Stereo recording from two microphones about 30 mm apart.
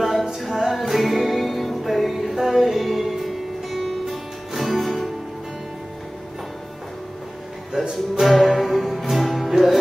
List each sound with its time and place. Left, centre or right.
0.0 s music: centre
7.8 s music: centre